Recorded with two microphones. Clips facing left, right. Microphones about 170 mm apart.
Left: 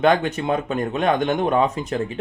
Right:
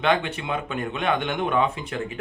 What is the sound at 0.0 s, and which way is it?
Speech, 40° left (ahead or behind).